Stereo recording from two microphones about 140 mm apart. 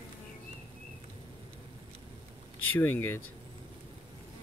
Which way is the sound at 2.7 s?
15° left (ahead or behind).